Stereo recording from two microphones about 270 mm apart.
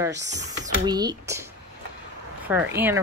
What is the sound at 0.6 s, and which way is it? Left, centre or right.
Speech, centre.